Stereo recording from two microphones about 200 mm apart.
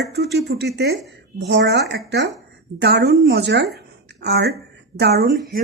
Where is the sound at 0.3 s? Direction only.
55° right (ahead or behind).